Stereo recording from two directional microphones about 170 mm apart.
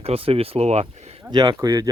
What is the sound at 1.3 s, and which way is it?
Speech, 25° right (ahead or behind).